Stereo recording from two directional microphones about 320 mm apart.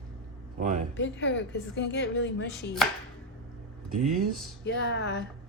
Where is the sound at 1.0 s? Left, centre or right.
Left.